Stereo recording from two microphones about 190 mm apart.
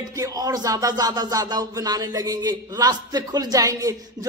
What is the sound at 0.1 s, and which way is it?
A man's voice, 20° right (ahead or behind).